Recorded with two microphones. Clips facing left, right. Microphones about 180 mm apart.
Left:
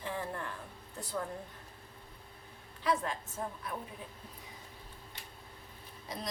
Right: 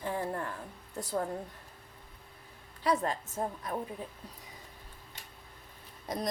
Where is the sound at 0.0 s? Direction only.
40° right (ahead or behind).